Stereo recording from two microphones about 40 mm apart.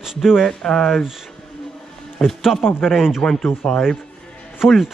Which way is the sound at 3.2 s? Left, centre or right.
Left.